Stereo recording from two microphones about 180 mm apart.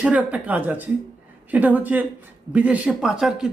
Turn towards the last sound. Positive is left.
turn(degrees=-5)  # may be behind; listen again after turning